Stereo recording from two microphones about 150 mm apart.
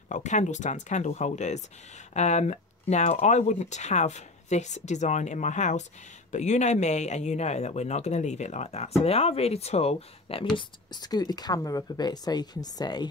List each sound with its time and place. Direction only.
0.1 s speech: 55° left (ahead or behind)
10.6 s speech: 30° left (ahead or behind)